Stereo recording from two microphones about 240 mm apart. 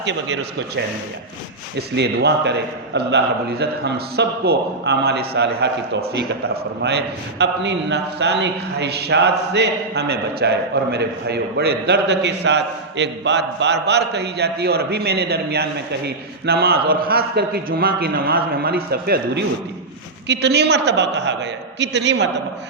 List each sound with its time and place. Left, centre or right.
0.0 s a man's voice: right
2.0 s a man's voice: right